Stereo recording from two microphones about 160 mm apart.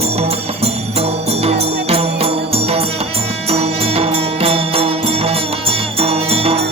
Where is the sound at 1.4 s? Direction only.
40° right (ahead or behind).